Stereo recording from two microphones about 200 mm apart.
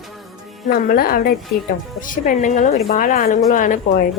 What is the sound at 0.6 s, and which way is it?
A woman's voice, 45° left (ahead or behind).